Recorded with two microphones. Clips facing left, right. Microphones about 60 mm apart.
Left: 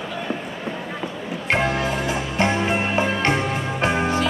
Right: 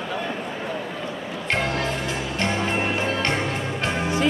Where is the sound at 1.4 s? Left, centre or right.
Centre.